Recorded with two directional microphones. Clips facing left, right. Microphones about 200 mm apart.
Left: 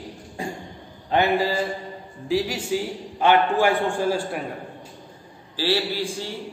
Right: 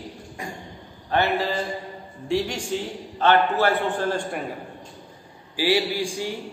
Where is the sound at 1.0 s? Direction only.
15° left (ahead or behind).